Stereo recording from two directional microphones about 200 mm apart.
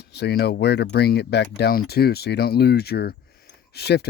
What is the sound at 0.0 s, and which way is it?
Speech, 55° left (ahead or behind).